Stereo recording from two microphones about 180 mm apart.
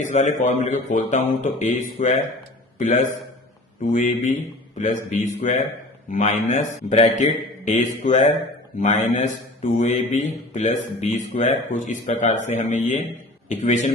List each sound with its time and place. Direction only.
0.0 s a man's voice: 40° left (ahead or behind)